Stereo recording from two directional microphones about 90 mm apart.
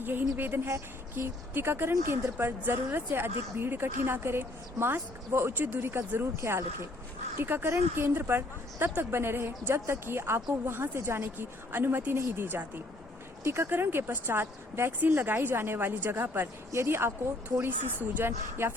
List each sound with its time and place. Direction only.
0.0 s speech: 20° right (ahead or behind)